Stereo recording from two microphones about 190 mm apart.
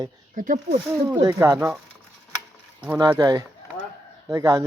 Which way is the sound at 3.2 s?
20° right (ahead or behind).